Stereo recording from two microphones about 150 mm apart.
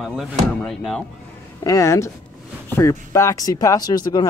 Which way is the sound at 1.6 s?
20° left (ahead or behind).